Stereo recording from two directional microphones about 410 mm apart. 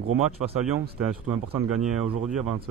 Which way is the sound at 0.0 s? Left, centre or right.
Right.